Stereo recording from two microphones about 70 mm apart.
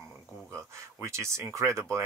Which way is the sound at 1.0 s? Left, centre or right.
Right.